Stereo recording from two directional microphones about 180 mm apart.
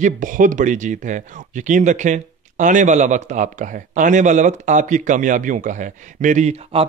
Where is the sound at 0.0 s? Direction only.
50° right (ahead or behind).